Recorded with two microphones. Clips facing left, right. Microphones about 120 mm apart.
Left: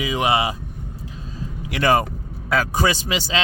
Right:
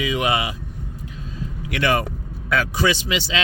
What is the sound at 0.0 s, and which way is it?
Speech, 30° left (ahead or behind).